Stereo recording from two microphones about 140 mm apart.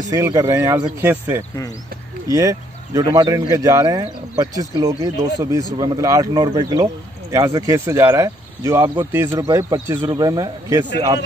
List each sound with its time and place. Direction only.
0.1 s speech: 25° right (ahead or behind)
2.3 s speech: 25° right (ahead or behind)